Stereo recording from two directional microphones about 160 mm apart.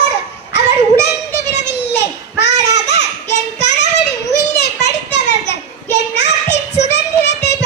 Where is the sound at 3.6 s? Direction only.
90° left.